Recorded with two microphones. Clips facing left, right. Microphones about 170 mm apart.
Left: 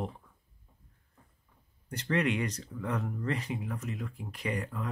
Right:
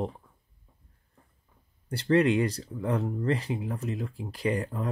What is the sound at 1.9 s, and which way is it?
Speech, 30° right (ahead or behind).